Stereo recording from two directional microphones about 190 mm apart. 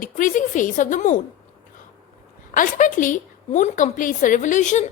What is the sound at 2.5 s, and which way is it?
A woman's voice, 45° left (ahead or behind).